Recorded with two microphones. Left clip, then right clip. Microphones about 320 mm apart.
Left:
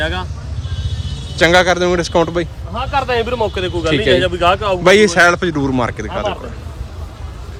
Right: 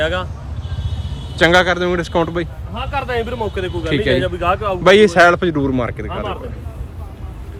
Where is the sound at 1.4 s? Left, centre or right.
Centre.